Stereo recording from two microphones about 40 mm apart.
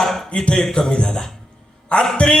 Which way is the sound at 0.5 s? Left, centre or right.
Centre.